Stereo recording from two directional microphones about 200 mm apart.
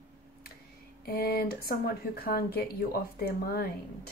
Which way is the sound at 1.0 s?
50° left (ahead or behind).